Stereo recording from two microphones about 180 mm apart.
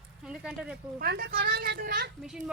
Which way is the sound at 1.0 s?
55° right (ahead or behind).